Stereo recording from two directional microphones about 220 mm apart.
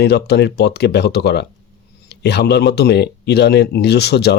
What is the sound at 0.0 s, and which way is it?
Speech, 50° left (ahead or behind).